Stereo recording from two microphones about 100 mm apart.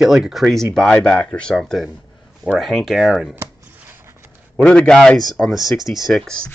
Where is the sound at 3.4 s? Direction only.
20° right (ahead or behind).